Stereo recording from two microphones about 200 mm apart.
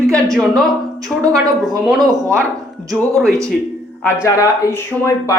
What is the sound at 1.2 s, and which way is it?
Speech, 15° right (ahead or behind).